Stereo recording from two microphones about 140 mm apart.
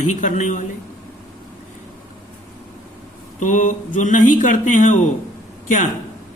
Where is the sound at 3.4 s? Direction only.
65° left (ahead or behind).